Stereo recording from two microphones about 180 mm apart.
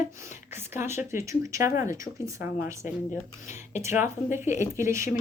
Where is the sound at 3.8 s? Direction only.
15° right (ahead or behind).